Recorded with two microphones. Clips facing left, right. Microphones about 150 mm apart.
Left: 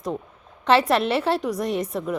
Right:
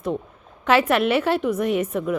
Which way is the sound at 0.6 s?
30° left (ahead or behind).